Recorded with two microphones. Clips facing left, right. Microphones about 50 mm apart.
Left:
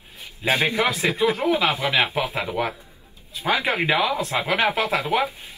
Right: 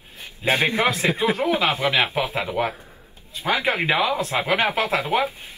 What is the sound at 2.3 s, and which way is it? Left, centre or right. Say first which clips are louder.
A man's voice: right 1 dB; centre.